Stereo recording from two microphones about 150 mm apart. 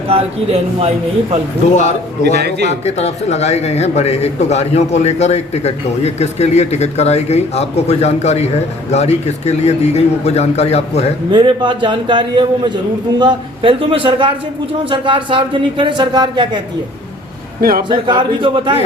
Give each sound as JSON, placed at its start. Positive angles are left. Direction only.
{"t": 0.1, "sound": "a man's voice", "side_deg": -40}
{"t": 2.3, "sound": "a man's voice", "side_deg": -90}
{"t": 2.6, "sound": "speech", "side_deg": 45}
{"t": 11.3, "sound": "a man's voice", "side_deg": -30}
{"t": 17.6, "sound": "a man's voice", "side_deg": -75}
{"t": 17.8, "sound": "a man's voice", "side_deg": -30}